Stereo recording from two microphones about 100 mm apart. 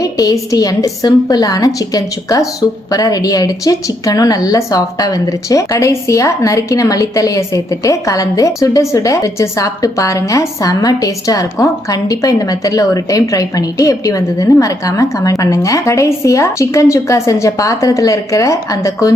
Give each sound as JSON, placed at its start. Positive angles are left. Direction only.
{"t": 0.0, "sound": "a woman's voice", "side_deg": 35}